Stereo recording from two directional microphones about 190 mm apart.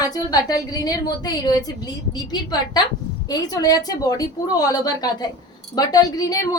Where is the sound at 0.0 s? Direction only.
20° left (ahead or behind).